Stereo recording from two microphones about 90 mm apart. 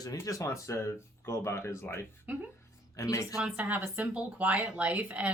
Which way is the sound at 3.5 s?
15° right (ahead or behind).